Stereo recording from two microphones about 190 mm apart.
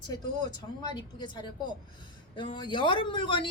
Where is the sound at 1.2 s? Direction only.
25° left (ahead or behind).